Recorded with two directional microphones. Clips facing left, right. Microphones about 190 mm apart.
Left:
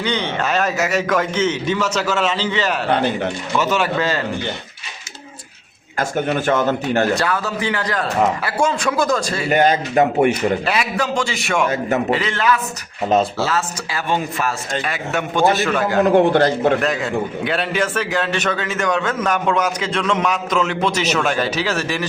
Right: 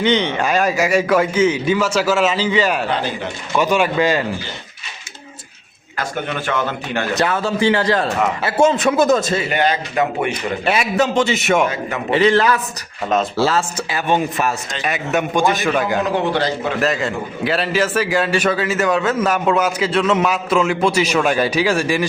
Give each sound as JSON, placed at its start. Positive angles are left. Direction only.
{"t": 0.0, "sound": "a man's voice", "side_deg": -20}
{"t": 2.9, "sound": "speech", "side_deg": 60}
{"t": 3.6, "sound": "a man's voice", "side_deg": -15}
{"t": 6.0, "sound": "speech", "side_deg": 45}
{"t": 7.2, "sound": "a man's voice", "side_deg": -25}
{"t": 9.5, "sound": "speech", "side_deg": 45}
{"t": 10.7, "sound": "a man's voice", "side_deg": -25}
{"t": 13.9, "sound": "a man's voice", "side_deg": -20}
{"t": 16.0, "sound": "speech", "side_deg": 50}
{"t": 16.8, "sound": "a man's voice", "side_deg": 0}